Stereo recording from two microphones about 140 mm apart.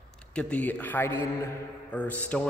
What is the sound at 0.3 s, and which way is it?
Speech, 10° left (ahead or behind).